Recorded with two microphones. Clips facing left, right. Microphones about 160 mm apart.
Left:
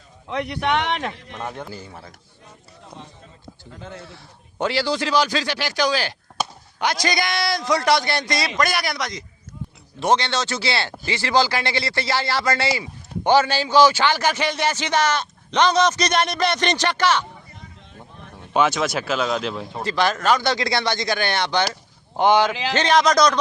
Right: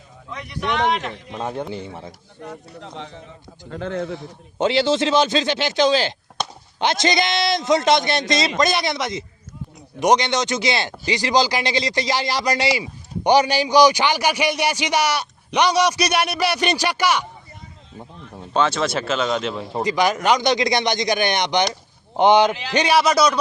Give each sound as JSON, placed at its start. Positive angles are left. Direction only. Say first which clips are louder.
{"t": 0.3, "sound": "speech", "louder": "left 5 dB", "side_deg": 65}
{"t": 1.3, "sound": "a man's voice", "louder": "right 5 dB", "side_deg": -20}
{"t": 2.4, "sound": "a man's voice", "louder": "right 12 dB", "side_deg": -80}
{"t": 4.2, "sound": "a man's voice", "louder": "right 4 dB", "side_deg": -20}
{"t": 18.5, "sound": "speech", "louder": "even", "side_deg": 5}
{"t": 19.8, "sound": "speech", "louder": "right 2 dB", "side_deg": -15}